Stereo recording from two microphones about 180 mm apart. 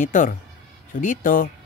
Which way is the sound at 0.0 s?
45° left (ahead or behind).